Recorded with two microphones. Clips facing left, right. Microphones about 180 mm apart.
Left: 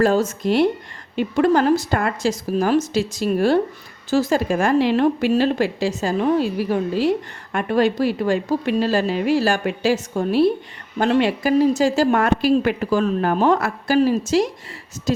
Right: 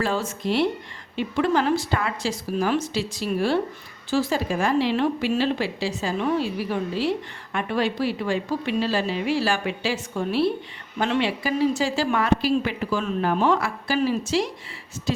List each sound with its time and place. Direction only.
0.0 s speech: 45° left (ahead or behind)